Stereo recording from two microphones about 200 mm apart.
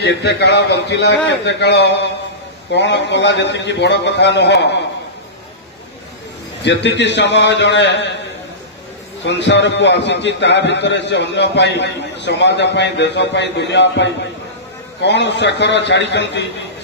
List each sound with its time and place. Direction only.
0.0 s a man's voice: 60° left (ahead or behind)
6.6 s a man's voice: 60° left (ahead or behind)
9.2 s a man's voice: 60° left (ahead or behind)